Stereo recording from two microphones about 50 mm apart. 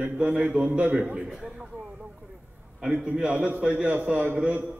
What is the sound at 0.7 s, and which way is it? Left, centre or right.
Speech, right.